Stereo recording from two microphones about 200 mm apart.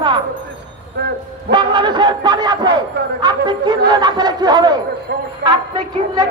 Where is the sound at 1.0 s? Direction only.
55° right (ahead or behind).